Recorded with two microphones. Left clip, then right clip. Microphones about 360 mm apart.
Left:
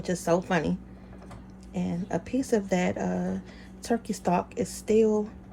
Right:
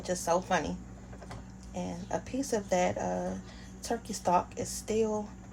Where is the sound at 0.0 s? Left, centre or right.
Left.